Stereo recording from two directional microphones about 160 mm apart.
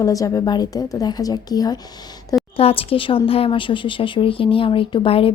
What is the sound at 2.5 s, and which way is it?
Speech, 35° left (ahead or behind).